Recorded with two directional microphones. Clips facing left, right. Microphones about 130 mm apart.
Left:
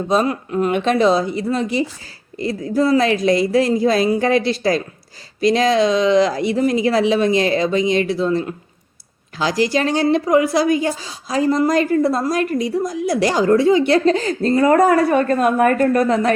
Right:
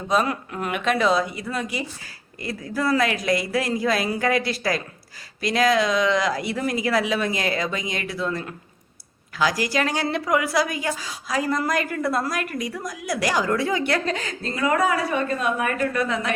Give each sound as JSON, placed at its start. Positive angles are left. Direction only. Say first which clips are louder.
{"t": 0.1, "sound": "a woman's voice", "louder": "left 4 dB", "side_deg": 30}